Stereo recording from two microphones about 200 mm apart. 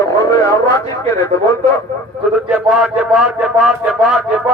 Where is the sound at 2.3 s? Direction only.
5° right (ahead or behind).